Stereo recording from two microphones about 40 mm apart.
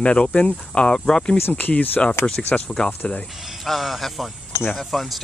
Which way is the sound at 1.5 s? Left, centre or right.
Left.